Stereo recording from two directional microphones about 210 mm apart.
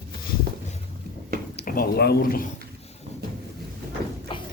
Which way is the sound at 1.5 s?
40° left (ahead or behind).